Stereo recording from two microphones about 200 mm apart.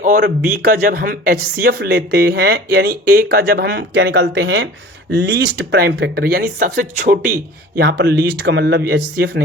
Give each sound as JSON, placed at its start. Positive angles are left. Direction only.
{"t": 0.0, "sound": "speech", "side_deg": -45}
{"t": 7.8, "sound": "speech", "side_deg": -60}